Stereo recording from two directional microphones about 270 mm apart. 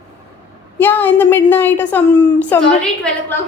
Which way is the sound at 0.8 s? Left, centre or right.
Centre.